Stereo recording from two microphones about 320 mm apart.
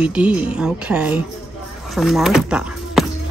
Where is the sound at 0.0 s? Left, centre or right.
Centre.